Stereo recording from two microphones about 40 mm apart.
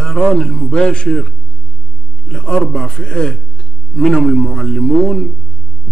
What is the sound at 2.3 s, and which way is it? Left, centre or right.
A man's voice, left.